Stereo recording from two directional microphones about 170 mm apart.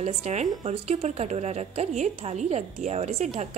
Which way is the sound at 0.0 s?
40° right (ahead or behind).